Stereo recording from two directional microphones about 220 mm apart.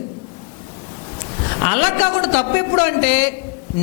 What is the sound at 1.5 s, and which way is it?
A woman's voice, 15° left (ahead or behind).